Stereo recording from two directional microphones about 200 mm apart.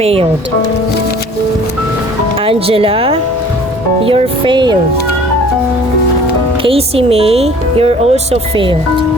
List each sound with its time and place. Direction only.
0.0 s speech: 30° right (ahead or behind)
2.4 s speech: 30° right (ahead or behind)
6.6 s speech: 30° right (ahead or behind)